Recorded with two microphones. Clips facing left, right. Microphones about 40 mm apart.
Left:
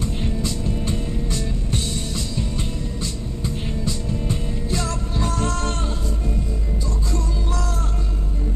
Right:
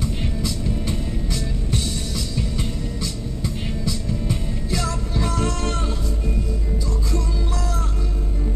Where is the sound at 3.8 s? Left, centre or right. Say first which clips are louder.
Right 1 dB; left.